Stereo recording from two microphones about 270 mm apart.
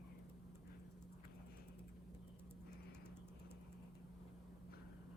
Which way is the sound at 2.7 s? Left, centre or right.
Centre.